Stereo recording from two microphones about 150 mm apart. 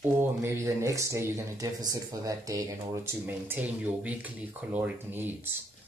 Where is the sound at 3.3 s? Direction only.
10° right (ahead or behind).